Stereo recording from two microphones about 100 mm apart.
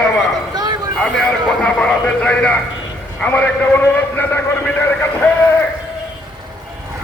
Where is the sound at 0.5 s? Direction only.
40° right (ahead or behind).